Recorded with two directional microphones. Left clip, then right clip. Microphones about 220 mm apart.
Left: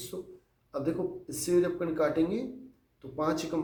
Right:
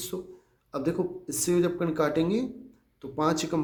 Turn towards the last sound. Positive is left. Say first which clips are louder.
# right 4 dB
turn(degrees=-50)  # may be behind; listen again after turning